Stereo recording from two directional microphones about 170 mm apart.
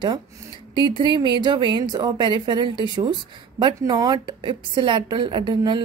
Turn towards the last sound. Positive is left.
turn(degrees=-25)  # may be behind; listen again after turning